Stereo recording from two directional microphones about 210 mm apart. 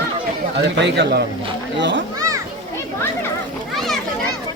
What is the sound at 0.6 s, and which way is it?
A man's voice, 55° right (ahead or behind).